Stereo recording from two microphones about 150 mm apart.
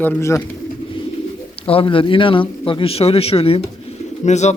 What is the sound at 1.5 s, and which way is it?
A man's voice, 40° left (ahead or behind).